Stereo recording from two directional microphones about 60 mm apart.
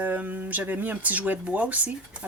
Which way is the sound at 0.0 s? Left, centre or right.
Right.